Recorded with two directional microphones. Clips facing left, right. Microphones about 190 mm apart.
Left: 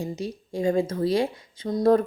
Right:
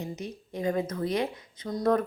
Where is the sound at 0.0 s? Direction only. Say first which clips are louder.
Left 5 dB; 30° left (ahead or behind).